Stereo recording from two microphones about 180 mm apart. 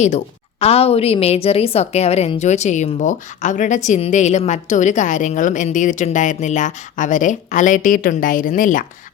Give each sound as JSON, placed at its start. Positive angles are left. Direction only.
{"t": 0.6, "sound": "a woman's voice", "side_deg": 35}